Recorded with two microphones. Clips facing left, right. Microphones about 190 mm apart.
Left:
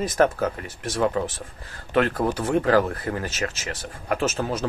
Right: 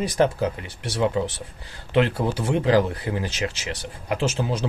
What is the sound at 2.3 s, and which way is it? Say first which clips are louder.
Speech: right 1 dB; 15° right (ahead or behind).